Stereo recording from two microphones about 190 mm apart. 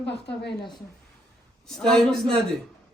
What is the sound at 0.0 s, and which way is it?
Speech, 65° left (ahead or behind).